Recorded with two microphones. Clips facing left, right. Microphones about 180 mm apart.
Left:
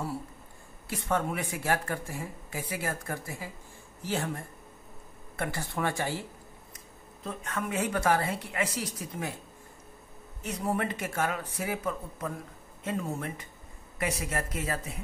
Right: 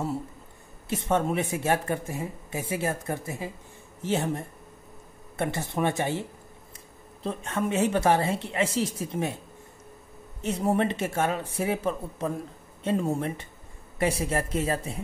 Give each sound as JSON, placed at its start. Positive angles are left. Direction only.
{"t": 0.8, "sound": "speech", "side_deg": -25}
{"t": 7.2, "sound": "speech", "side_deg": -25}
{"t": 10.4, "sound": "speech", "side_deg": -25}